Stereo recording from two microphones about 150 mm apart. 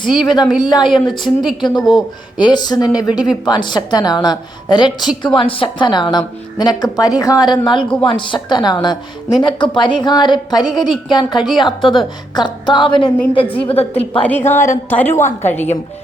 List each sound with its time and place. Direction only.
0.1 s a woman's voice: 30° left (ahead or behind)
1.2 s a woman's voice: centre (ahead or behind)
1.6 s a woman's voice: 30° left (ahead or behind)
11.3 s a woman's voice: centre (ahead or behind)
11.6 s a woman's voice: 30° left (ahead or behind)
14.2 s a woman's voice: 10° left (ahead or behind)